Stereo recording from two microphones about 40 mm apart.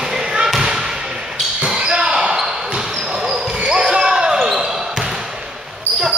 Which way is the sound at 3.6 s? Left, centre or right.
Right.